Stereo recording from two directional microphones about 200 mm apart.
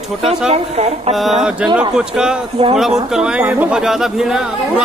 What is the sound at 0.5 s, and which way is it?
Speech, 30° right (ahead or behind).